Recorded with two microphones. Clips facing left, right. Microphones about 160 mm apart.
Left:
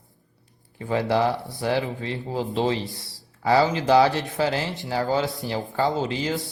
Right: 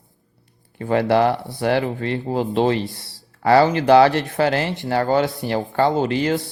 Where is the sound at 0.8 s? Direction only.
65° right (ahead or behind).